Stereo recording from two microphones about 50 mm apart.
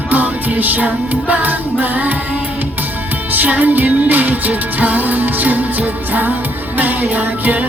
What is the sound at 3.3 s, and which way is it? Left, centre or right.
Music, right.